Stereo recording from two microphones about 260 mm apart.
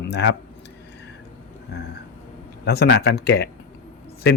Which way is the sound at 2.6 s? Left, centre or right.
Left.